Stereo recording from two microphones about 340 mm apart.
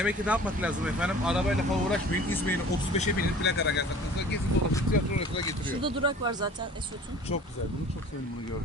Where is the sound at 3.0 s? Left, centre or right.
Left.